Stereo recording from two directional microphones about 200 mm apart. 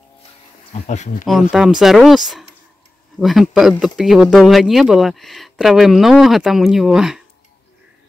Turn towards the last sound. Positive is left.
turn(degrees=0)  # may be behind; listen again after turning